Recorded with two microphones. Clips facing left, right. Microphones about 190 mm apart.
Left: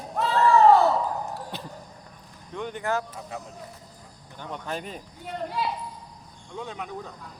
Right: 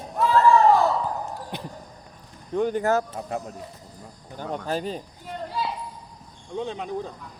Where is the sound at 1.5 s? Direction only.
15° right (ahead or behind).